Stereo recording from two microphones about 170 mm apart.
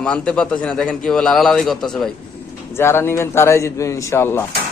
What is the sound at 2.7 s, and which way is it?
Speech, 15° left (ahead or behind).